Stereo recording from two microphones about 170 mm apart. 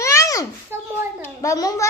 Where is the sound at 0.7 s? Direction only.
15° right (ahead or behind).